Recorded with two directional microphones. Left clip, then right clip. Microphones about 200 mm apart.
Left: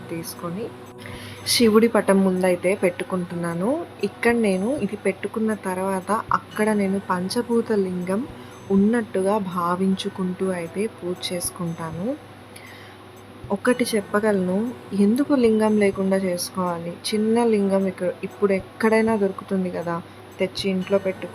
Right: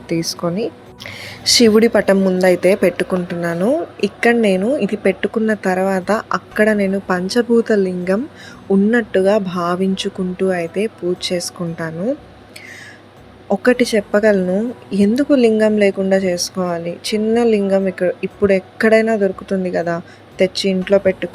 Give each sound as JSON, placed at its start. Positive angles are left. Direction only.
{"t": 0.1, "sound": "speech", "side_deg": -30}
{"t": 1.2, "sound": "a woman's voice", "side_deg": -15}
{"t": 13.5, "sound": "a woman's voice", "side_deg": -15}